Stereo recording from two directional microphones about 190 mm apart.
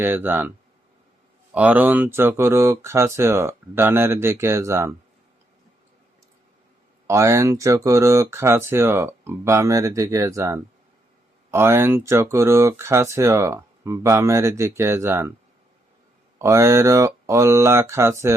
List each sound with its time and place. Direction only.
0.0 s speech: 10° right (ahead or behind)
1.5 s speech: 10° right (ahead or behind)
7.1 s speech: 15° right (ahead or behind)
16.4 s speech: 15° right (ahead or behind)